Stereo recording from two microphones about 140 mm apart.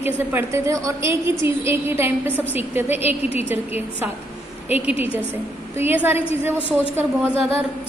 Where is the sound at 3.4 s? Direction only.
15° right (ahead or behind).